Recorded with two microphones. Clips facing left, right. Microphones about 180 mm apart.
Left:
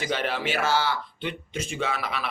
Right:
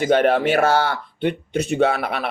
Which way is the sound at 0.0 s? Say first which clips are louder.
Right 11 dB; 50° right (ahead or behind).